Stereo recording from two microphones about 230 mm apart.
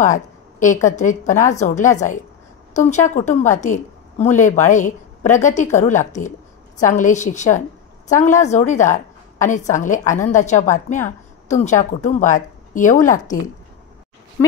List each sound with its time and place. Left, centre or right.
0.0 s a woman's voice: left